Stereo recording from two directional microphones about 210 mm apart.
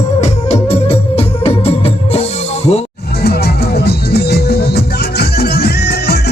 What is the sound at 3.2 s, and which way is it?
Music, 50° left (ahead or behind).